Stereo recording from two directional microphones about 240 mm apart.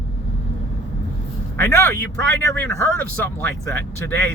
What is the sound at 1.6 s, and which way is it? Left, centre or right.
Speech, centre.